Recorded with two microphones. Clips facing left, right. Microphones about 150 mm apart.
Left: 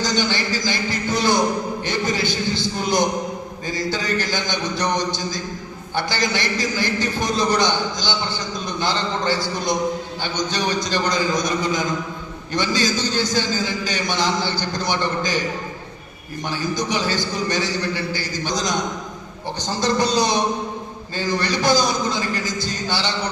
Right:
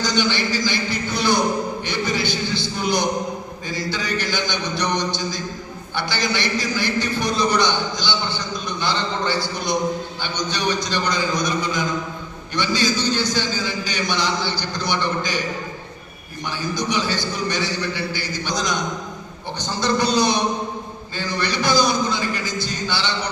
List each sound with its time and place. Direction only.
0.0 s a sound: 45° left (ahead or behind)
6.0 s a man's voice: 45° left (ahead or behind)
16.7 s a man's voice: 45° left (ahead or behind)